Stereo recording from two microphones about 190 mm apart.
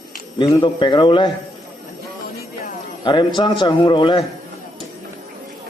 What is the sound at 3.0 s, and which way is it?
A man's voice, 25° left (ahead or behind).